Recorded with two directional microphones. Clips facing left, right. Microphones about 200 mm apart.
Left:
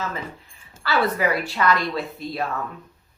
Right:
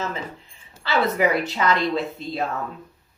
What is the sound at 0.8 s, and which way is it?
Speech, 20° right (ahead or behind).